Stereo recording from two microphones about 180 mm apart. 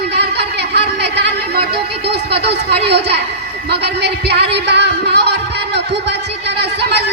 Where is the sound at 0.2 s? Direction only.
65° right (ahead or behind).